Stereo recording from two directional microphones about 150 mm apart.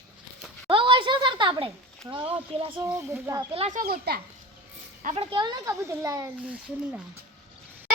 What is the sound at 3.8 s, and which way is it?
Speech, 90° right.